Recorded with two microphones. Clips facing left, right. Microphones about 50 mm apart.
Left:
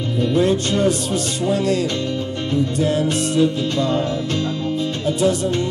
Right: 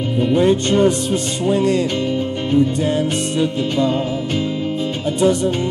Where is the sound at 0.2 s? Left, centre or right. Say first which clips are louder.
Right 2 dB; right.